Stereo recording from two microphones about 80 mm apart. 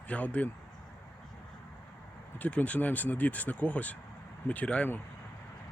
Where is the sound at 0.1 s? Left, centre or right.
Centre.